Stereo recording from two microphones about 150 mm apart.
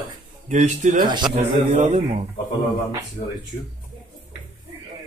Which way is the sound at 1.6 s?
45° right (ahead or behind).